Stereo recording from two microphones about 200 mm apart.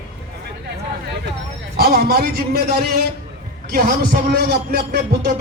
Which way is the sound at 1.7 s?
50° right (ahead or behind).